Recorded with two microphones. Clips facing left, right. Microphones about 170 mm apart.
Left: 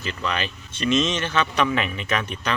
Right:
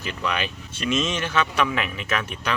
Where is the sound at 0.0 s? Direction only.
10° right (ahead or behind).